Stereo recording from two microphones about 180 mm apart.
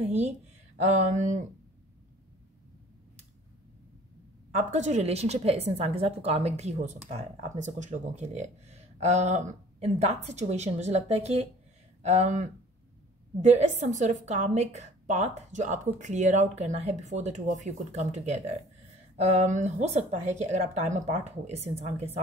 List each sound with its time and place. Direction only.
0.0 s a woman's voice: 35° right (ahead or behind)
0.8 s a sound: 40° right (ahead or behind)
4.6 s a woman's voice: 40° right (ahead or behind)